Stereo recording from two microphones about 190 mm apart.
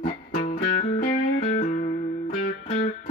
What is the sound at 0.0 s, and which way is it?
Music, 30° left (ahead or behind).